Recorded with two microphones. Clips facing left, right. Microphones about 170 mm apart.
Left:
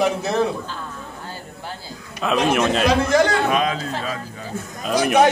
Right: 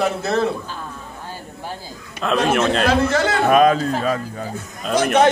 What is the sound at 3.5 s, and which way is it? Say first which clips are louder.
Speech: right 7 dB; 50° right (ahead or behind).